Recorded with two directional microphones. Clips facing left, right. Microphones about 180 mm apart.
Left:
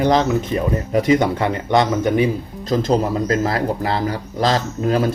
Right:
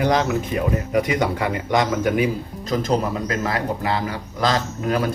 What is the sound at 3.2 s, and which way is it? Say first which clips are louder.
Speech: left 5 dB; 35° left (ahead or behind).